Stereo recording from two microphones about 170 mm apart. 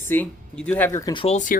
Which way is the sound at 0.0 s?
10° left (ahead or behind).